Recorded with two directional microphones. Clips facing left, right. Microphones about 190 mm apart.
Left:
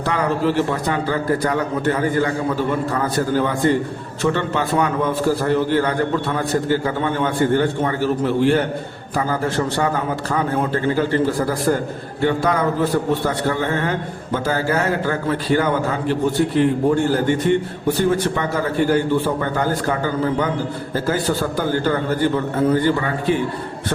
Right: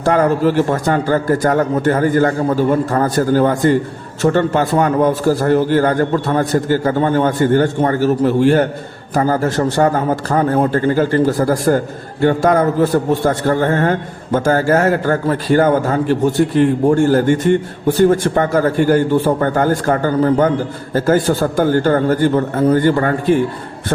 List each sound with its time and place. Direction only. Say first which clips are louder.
0.0 s a man's voice: right 6 dB; 45° right (ahead or behind)